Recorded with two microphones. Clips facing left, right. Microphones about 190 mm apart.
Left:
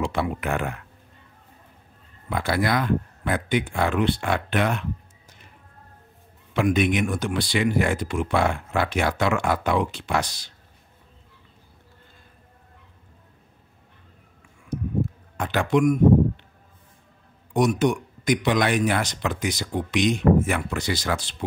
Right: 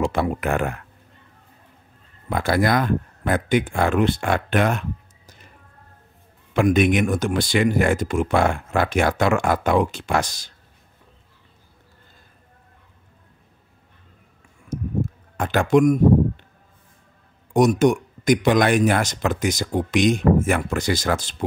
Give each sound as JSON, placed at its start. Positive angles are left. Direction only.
{"t": 0.0, "sound": "speech", "side_deg": -45}
{"t": 2.2, "sound": "speech", "side_deg": -45}
{"t": 6.5, "sound": "speech", "side_deg": -50}
{"t": 14.7, "sound": "a sound", "side_deg": -45}
{"t": 17.5, "sound": "speech", "side_deg": -45}